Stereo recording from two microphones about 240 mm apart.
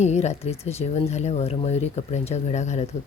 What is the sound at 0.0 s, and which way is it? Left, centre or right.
Speech, left.